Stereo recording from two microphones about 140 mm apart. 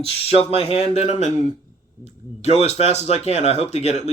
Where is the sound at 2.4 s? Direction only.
50° left (ahead or behind).